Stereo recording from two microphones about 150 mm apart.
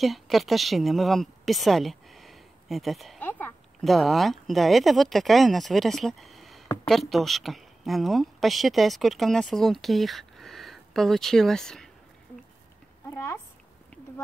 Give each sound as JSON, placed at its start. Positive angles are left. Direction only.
{"t": 0.0, "sound": "speech", "side_deg": 0}
{"t": 3.2, "sound": "a sound", "side_deg": 10}
{"t": 3.8, "sound": "speech", "side_deg": 0}
{"t": 13.1, "sound": "speech", "side_deg": 20}